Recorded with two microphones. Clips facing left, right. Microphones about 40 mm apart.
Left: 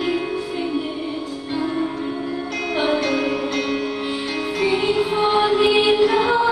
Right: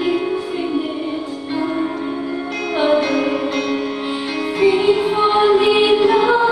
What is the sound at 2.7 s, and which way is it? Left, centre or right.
Music, centre.